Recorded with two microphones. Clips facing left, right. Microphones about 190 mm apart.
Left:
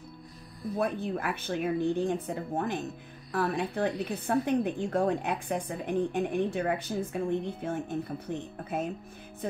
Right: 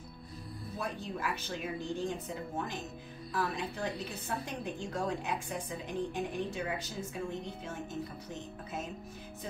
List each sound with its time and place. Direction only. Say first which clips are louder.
0.7 s a woman's voice: left 8 dB; 55° left (ahead or behind)